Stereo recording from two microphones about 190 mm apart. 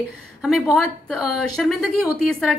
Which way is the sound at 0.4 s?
Centre (ahead or behind).